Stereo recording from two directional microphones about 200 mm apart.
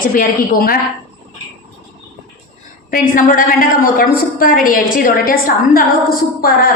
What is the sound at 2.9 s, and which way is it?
A woman's voice, 45° left (ahead or behind).